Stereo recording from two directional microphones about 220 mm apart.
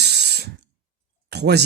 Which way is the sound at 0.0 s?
50° right (ahead or behind).